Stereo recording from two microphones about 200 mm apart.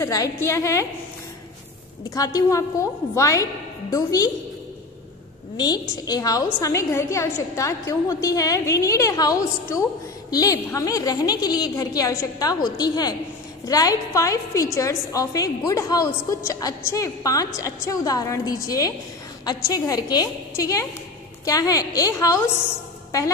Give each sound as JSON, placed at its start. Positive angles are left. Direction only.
{"t": 0.0, "sound": "a woman's voice", "side_deg": 15}
{"t": 2.0, "sound": "a woman's voice", "side_deg": 15}
{"t": 5.6, "sound": "a woman's voice", "side_deg": 20}